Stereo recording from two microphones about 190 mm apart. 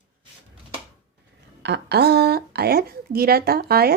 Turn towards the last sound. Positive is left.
turn(degrees=-55)  # may be behind; listen again after turning